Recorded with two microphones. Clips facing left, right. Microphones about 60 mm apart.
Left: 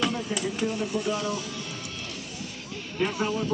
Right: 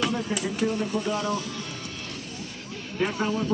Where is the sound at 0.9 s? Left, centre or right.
Right.